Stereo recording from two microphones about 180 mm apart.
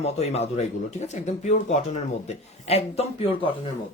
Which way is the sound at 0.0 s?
35° left (ahead or behind).